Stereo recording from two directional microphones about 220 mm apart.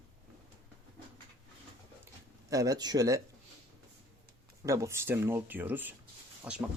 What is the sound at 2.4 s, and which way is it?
Speech, 15° right (ahead or behind).